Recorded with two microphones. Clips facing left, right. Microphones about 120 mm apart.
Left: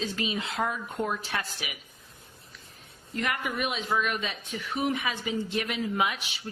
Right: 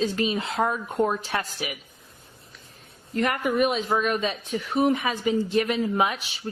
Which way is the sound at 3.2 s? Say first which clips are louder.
Right 8 dB; 40° right (ahead or behind).